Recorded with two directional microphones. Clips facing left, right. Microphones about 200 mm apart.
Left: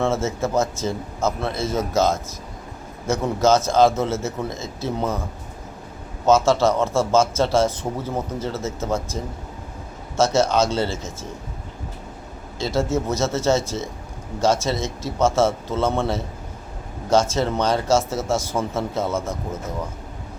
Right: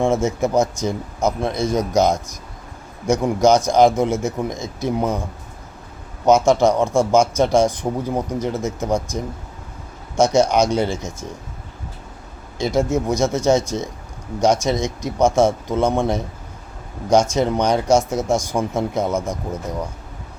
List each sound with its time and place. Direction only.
0.0 s speech: 15° right (ahead or behind)
6.2 s speech: 15° right (ahead or behind)
12.5 s speech: 15° right (ahead or behind)